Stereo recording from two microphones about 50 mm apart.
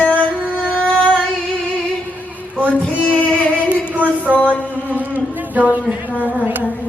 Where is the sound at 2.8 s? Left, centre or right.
Left.